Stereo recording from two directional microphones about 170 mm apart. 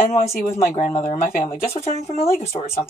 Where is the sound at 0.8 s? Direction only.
45° left (ahead or behind).